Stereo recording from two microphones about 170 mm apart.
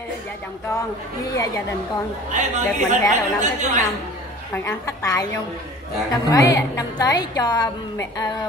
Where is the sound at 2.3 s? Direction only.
45° right (ahead or behind).